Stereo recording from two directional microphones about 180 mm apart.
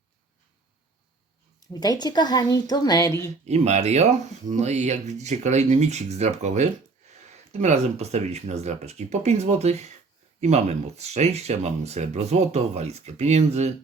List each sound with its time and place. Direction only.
1.7 s speech: 20° left (ahead or behind)
3.4 s speech: 40° right (ahead or behind)